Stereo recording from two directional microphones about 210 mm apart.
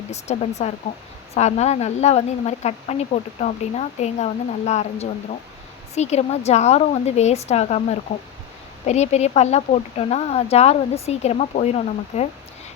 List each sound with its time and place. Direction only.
0.1 s speech: 30° left (ahead or behind)